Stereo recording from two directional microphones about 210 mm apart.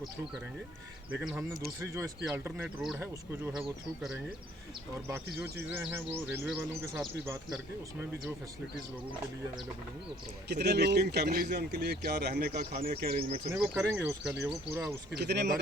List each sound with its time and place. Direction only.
1.1 s speech: 5° right (ahead or behind)
5.0 s speech: 10° right (ahead or behind)
10.5 s speech: 50° right (ahead or behind)
13.7 s speech: 10° right (ahead or behind)
15.1 s speech: 55° right (ahead or behind)